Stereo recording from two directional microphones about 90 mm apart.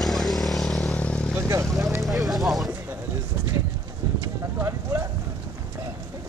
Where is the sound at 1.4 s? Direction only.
35° right (ahead or behind).